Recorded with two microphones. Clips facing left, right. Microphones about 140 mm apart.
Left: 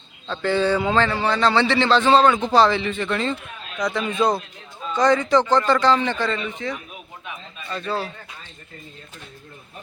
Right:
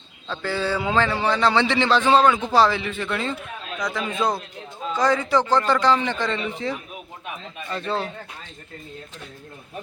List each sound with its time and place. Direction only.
0.3 s a man's voice: 5° right (ahead or behind)
6.4 s speech: 30° right (ahead or behind)